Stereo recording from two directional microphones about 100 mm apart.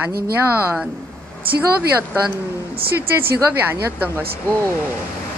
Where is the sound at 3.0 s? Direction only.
20° right (ahead or behind).